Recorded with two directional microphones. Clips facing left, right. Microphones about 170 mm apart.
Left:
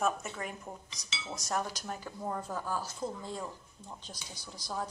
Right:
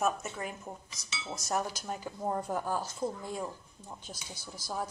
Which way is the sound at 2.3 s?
20° right (ahead or behind).